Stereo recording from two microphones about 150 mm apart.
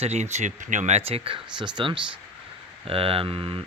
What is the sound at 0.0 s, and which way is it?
Speech, 50° right (ahead or behind).